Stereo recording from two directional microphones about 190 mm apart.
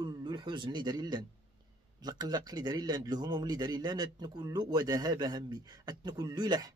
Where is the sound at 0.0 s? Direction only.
25° right (ahead or behind).